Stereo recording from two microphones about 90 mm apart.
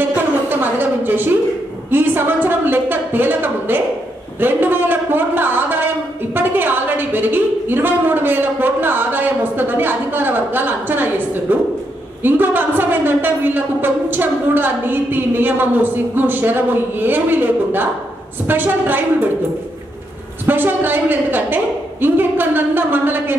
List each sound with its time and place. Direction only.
0.0 s a sound: 20° right (ahead or behind)
12.2 s a woman's voice: 20° right (ahead or behind)
20.4 s a woman's voice: 20° right (ahead or behind)